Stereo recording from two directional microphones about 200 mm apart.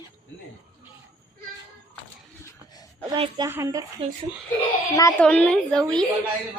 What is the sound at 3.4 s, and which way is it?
Speech, 15° right (ahead or behind).